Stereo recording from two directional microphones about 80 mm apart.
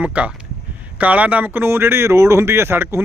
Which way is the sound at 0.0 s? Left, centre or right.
Centre.